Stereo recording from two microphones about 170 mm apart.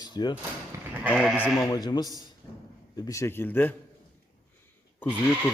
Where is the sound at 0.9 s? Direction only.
5° right (ahead or behind).